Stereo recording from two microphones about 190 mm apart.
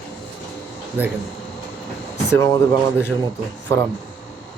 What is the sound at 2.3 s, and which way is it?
Speech, 15° left (ahead or behind).